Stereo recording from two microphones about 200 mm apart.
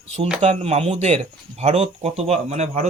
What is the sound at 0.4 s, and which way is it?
Speech, 30° right (ahead or behind).